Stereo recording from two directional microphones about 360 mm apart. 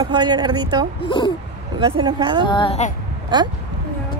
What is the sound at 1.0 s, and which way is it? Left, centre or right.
Speech, centre.